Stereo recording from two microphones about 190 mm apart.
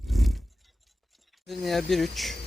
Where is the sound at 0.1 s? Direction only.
Centre (ahead or behind).